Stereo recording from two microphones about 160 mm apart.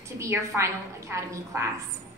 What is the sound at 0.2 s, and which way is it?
A woman's voice, 15° right (ahead or behind).